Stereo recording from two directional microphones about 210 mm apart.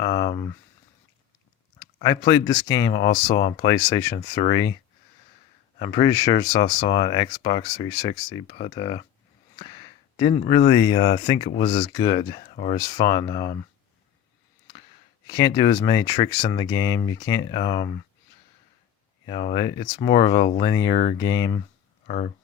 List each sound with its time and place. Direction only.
0.0 s speech: 20° left (ahead or behind)
1.8 s speech: 20° left (ahead or behind)
5.8 s speech: 20° left (ahead or behind)
15.3 s speech: 20° left (ahead or behind)
19.2 s speech: 25° left (ahead or behind)
20.9 s speech: 35° left (ahead or behind)
21.2 s speech: 15° left (ahead or behind)
22.0 s speech: 35° left (ahead or behind)